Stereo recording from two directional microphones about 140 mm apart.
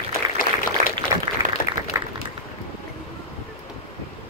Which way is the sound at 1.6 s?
90° left.